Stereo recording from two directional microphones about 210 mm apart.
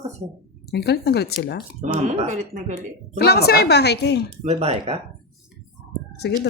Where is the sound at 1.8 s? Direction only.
35° right (ahead or behind).